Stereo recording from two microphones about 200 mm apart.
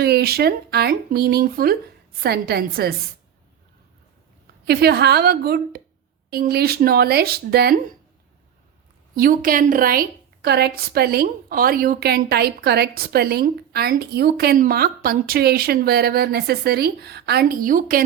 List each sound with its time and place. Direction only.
0.0 s a woman's voice: 50° right (ahead or behind)
4.6 s a woman's voice: 55° right (ahead or behind)
9.1 s a woman's voice: 45° right (ahead or behind)